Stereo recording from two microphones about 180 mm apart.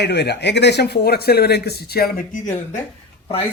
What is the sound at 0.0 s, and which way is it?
Speech, 70° left (ahead or behind).